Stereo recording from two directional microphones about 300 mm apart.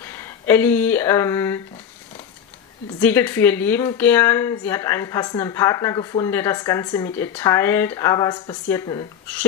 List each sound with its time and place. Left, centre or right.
0.0 s speech: centre
3.0 s speech: centre